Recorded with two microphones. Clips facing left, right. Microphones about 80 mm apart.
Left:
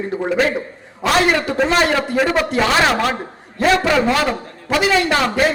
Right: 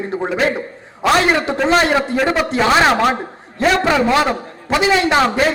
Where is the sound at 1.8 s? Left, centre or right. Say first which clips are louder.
Right 1 dB; right.